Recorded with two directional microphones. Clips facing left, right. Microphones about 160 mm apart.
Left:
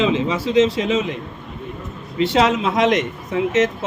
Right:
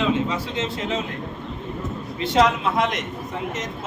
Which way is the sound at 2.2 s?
80° left.